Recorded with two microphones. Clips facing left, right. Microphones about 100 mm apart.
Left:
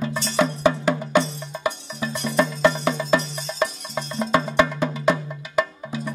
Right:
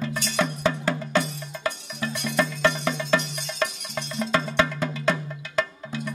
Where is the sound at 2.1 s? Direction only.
35° left (ahead or behind).